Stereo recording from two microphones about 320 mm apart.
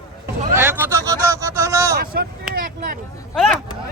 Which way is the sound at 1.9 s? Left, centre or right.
Right.